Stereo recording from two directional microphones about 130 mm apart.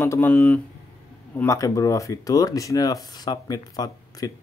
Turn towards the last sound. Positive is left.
turn(degrees=30)  # may be behind; listen again after turning